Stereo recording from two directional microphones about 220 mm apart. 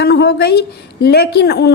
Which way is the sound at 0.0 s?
50° left (ahead or behind).